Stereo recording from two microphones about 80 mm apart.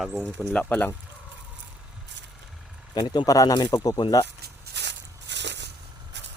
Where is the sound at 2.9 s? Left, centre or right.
Left.